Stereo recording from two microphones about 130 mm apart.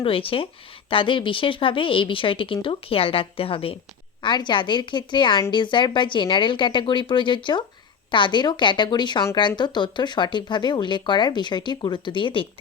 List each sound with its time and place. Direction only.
0.0 s a woman's voice: 45° left (ahead or behind)
4.2 s speech: 35° left (ahead or behind)